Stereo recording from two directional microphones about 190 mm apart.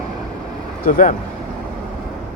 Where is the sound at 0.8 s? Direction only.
45° left (ahead or behind).